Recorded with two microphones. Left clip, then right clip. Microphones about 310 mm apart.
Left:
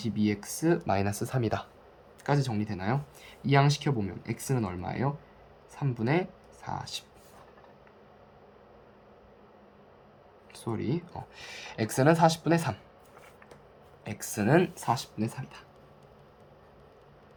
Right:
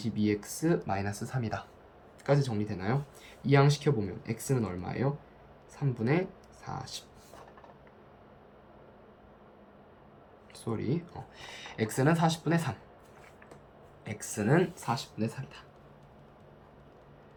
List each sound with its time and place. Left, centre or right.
0.0 s speech: centre
10.5 s speech: centre
14.0 s speech: centre